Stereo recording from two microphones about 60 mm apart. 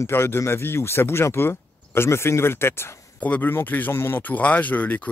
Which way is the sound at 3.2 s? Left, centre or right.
Left.